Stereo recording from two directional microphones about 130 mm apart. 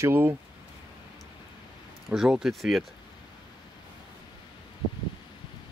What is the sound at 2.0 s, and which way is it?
Speech, 5° right (ahead or behind).